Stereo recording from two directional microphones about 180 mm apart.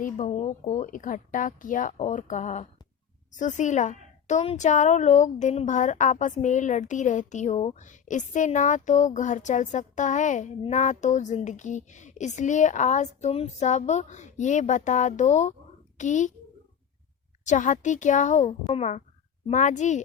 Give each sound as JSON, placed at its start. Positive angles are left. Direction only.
{"t": 0.0, "sound": "a woman's voice", "side_deg": 40}
{"t": 17.4, "sound": "a woman's voice", "side_deg": 45}